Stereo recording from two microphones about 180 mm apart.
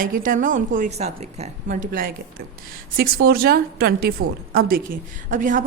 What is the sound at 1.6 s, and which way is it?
A woman's voice, 50° right (ahead or behind).